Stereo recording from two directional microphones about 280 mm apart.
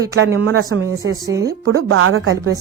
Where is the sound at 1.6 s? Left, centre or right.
Right.